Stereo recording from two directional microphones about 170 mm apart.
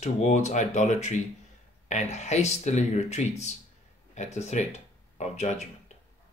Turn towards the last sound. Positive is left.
turn(degrees=40)  # may be behind; listen again after turning